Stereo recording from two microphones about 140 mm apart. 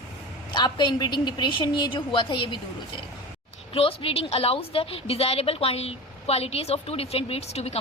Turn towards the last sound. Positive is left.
turn(degrees=50)  # may be behind; listen again after turning